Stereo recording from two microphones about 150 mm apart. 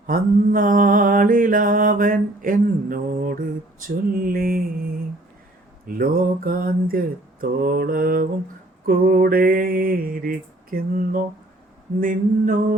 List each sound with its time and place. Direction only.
0.1 s mantra: 65° right (ahead or behind)